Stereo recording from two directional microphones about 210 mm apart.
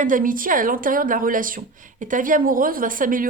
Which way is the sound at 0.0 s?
40° right (ahead or behind).